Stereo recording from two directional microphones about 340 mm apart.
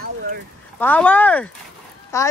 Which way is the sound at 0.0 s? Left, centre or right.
Right.